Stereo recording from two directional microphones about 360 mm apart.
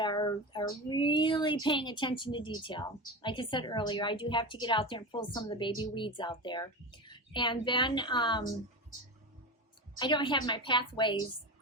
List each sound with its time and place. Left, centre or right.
0.0 s a sound: centre
0.9 s speech: centre
10.0 s speech: centre